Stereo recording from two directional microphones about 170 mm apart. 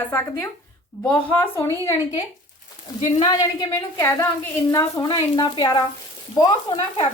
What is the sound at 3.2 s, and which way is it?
A woman's voice, 15° left (ahead or behind).